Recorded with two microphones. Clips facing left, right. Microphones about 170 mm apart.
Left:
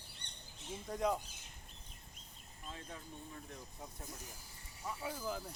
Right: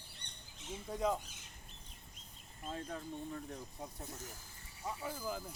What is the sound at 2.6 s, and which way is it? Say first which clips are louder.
Speech: right 7 dB; 45° right (ahead or behind).